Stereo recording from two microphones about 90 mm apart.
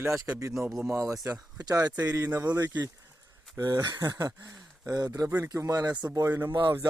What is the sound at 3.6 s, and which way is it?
Speech, 45° right (ahead or behind).